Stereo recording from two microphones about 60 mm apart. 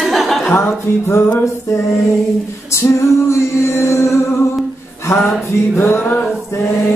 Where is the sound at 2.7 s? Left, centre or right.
Left.